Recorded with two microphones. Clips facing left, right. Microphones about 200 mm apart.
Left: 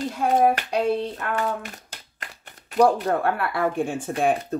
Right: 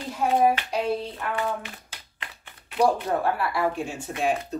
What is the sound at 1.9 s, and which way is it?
Clapping, 45° left (ahead or behind).